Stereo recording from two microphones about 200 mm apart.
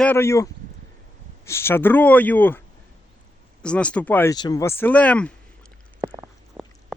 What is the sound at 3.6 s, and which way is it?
Speech, 5° left (ahead or behind).